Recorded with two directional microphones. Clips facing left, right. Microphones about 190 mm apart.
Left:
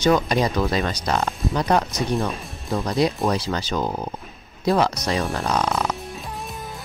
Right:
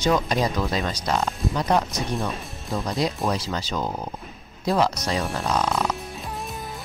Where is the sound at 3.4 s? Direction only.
65° left (ahead or behind).